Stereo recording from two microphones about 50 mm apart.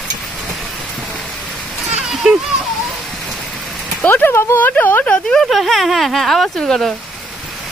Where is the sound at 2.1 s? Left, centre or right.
Centre.